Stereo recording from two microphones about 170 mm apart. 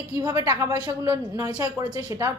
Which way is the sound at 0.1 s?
20° right (ahead or behind).